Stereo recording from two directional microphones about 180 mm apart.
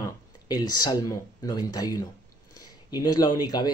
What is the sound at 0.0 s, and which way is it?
Speech, 20° left (ahead or behind).